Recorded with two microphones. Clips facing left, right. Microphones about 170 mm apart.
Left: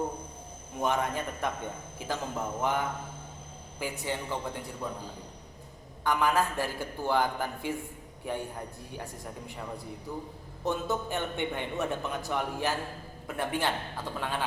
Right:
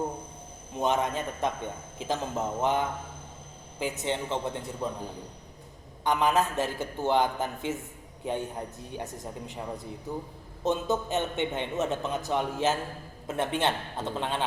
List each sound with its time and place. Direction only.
0.8 s a man's voice: 20° right (ahead or behind)
6.1 s a man's voice: 20° right (ahead or behind)